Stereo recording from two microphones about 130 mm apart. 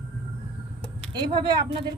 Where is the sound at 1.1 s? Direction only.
35° right (ahead or behind).